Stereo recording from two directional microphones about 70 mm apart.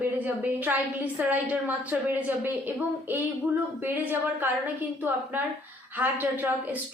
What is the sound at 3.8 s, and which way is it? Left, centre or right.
Speech, right.